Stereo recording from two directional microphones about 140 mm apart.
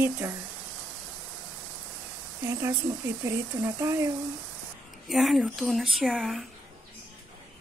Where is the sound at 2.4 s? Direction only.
20° right (ahead or behind).